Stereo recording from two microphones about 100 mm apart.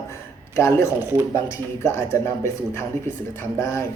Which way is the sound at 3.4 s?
25° left (ahead or behind).